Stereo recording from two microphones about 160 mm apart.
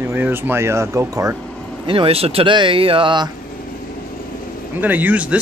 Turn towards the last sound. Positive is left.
turn(degrees=-10)  # may be behind; listen again after turning